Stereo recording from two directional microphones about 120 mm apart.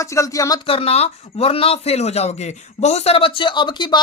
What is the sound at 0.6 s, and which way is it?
Speech, 50° left (ahead or behind).